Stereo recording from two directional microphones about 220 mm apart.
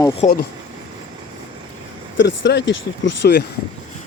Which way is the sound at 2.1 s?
55° left (ahead or behind).